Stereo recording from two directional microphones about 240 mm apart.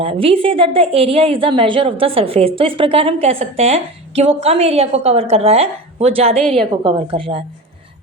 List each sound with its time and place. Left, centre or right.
0.0 s a woman's voice: right
6.4 s a woman's voice: centre
6.8 s a woman's voice: right